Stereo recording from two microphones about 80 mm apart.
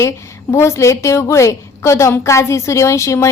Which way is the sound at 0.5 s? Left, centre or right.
Left.